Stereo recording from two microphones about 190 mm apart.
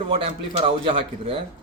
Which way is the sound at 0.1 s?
30° right (ahead or behind).